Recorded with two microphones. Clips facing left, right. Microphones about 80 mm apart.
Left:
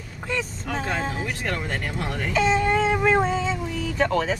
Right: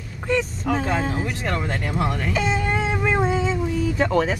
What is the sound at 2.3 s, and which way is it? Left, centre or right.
Child singing, centre.